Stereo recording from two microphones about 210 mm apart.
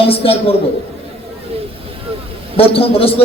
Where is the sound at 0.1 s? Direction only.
25° left (ahead or behind).